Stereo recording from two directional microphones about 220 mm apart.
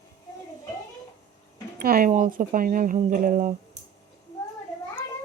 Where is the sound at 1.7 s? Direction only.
40° right (ahead or behind).